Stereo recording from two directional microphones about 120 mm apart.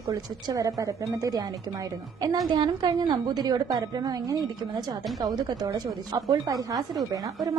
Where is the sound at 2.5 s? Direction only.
35° right (ahead or behind).